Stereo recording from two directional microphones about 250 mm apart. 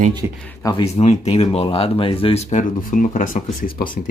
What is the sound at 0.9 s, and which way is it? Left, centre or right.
Speech, left.